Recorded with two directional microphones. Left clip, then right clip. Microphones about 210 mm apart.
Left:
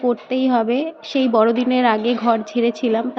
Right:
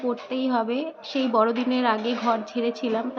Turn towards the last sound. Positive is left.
turn(degrees=25)  # may be behind; listen again after turning